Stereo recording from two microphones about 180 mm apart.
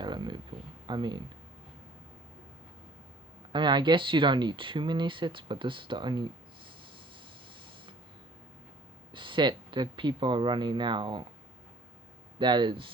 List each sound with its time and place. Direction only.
0.0 s a sound: 25° right (ahead or behind)
0.9 s speech: 25° right (ahead or behind)
3.5 s speech: 25° right (ahead or behind)
9.1 s speech: 25° right (ahead or behind)
12.4 s speech: 25° right (ahead or behind)